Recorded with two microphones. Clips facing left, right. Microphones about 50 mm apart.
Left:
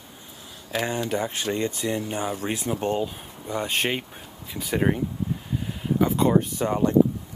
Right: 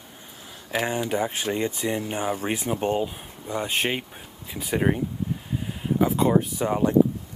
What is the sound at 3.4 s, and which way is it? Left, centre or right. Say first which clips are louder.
Speech: even; centre.